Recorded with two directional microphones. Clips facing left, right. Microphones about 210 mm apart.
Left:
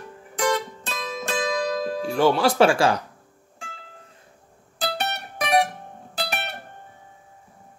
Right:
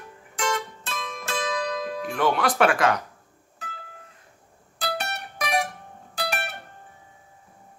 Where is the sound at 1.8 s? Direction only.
30° left (ahead or behind).